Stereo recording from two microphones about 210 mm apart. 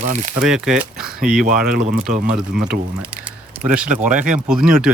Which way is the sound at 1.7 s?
45° right (ahead or behind).